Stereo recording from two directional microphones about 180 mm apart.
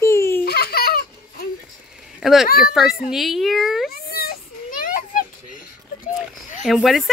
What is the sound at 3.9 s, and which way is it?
Children playing, 60° left (ahead or behind).